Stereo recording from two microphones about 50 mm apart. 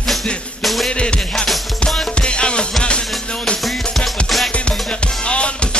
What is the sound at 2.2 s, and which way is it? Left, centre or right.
Music, centre.